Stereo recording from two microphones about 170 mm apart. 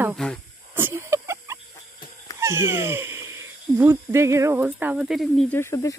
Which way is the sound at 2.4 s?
15° right (ahead or behind).